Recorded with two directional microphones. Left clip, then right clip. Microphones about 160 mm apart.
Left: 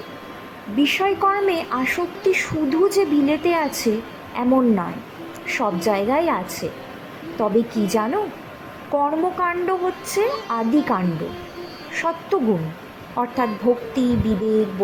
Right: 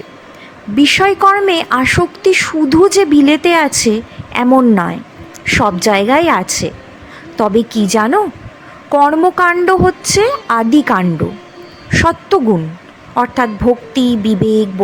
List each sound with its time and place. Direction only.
0.8 s a woman's voice: 30° right (ahead or behind)